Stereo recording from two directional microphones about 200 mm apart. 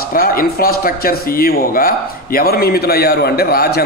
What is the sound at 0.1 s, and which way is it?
Speech, 45° left (ahead or behind).